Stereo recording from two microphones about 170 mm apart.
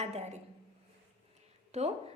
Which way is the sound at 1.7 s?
40° right (ahead or behind).